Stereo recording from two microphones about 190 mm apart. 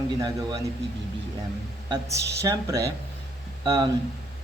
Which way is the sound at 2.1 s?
65° right (ahead or behind).